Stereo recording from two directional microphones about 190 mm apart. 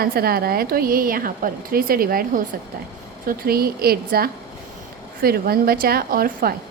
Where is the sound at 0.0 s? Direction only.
50° right (ahead or behind).